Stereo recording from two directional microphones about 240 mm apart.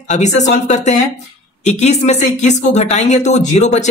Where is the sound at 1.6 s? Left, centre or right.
Left.